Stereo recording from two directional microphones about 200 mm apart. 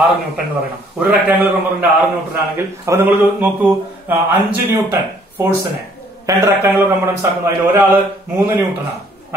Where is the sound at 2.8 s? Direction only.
15° right (ahead or behind).